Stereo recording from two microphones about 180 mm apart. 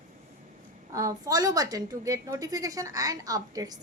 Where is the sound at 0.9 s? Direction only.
20° right (ahead or behind).